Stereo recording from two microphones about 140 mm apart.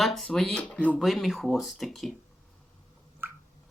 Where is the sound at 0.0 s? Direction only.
Centre (ahead or behind).